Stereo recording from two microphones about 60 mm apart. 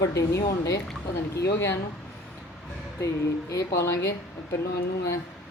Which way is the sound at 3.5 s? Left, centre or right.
Left.